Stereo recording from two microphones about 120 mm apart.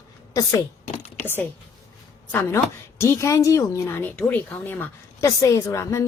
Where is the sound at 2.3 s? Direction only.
20° left (ahead or behind).